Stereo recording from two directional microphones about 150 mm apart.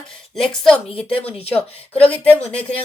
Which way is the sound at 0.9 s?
35° left (ahead or behind).